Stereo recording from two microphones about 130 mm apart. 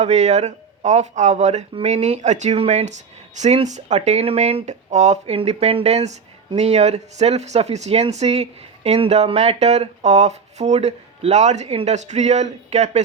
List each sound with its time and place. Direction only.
0.0 s speech: 60° right (ahead or behind)